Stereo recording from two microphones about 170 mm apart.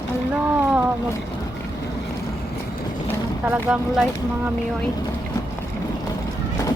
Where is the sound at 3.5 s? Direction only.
10° right (ahead or behind).